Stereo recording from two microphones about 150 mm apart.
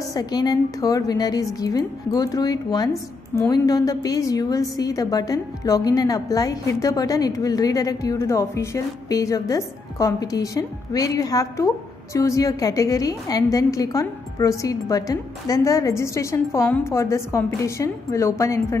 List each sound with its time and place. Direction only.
0.1 s a woman's voice: 25° left (ahead or behind)